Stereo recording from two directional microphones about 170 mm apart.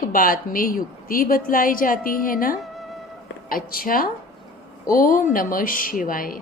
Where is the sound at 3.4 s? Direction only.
60° left (ahead or behind).